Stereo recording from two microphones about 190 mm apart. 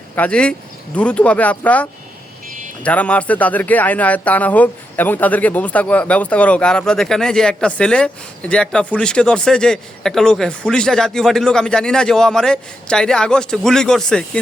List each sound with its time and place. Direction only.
0.2 s speech: 5° left (ahead or behind)
2.5 s a sound: 45° right (ahead or behind)
2.8 s speech: 5° left (ahead or behind)